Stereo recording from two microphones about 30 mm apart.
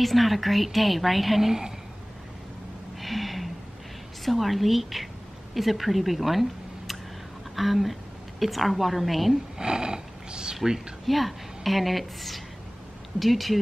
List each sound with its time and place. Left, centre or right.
0.0 s a woman's voice: centre
3.0 s snort: centre
4.2 s a woman's voice: centre
7.5 s a woman's voice: centre
9.6 s a sound: right
11.1 s a woman's voice: centre